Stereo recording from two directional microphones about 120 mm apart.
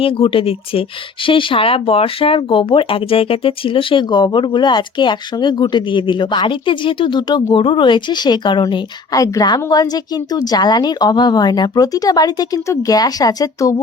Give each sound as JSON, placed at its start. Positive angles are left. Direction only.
{"t": 0.0, "sound": "a woman's voice", "side_deg": 50}
{"t": 9.1, "sound": "a woman's voice", "side_deg": 30}